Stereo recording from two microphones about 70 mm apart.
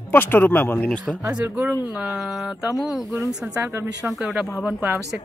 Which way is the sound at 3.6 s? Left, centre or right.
Right.